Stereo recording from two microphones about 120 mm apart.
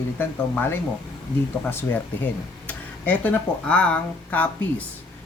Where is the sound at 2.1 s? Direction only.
15° left (ahead or behind).